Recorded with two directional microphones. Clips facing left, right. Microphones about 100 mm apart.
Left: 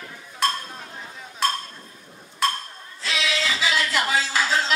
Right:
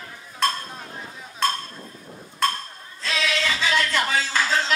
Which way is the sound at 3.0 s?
5° left (ahead or behind).